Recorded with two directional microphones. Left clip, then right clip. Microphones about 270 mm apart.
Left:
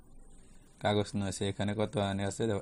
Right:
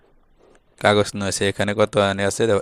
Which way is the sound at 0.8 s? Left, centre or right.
Right.